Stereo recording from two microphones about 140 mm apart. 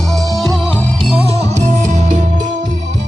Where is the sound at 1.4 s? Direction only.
55° right (ahead or behind).